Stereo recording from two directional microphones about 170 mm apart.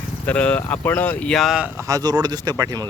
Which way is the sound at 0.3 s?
10° left (ahead or behind).